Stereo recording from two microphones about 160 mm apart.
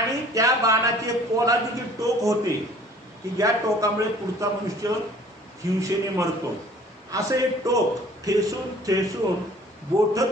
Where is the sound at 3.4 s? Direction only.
20° right (ahead or behind).